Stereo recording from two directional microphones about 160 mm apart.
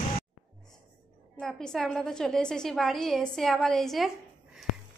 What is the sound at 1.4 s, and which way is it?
Speech, centre (ahead or behind).